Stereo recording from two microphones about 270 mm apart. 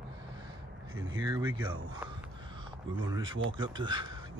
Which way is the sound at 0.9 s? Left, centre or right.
Right.